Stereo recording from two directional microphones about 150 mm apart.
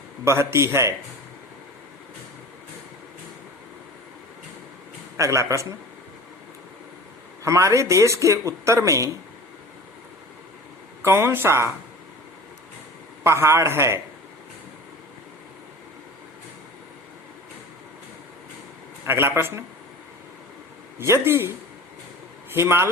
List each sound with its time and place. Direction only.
0.3 s speech: 20° right (ahead or behind)
5.1 s speech: 20° right (ahead or behind)
7.4 s speech: 20° right (ahead or behind)
11.0 s a man's voice: 15° right (ahead or behind)
13.2 s a man's voice: 20° right (ahead or behind)
19.0 s a man's voice: 15° right (ahead or behind)
21.0 s a man's voice: 15° right (ahead or behind)
22.5 s a man's voice: 15° right (ahead or behind)